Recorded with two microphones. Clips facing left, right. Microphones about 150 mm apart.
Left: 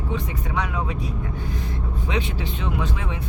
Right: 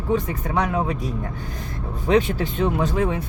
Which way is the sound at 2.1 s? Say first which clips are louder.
Right 10 dB; 45° right (ahead or behind).